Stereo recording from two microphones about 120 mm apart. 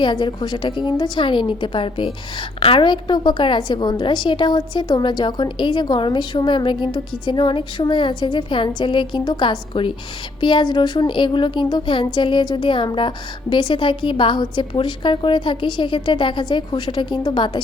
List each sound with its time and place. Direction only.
0.0 s a woman's voice: 40° left (ahead or behind)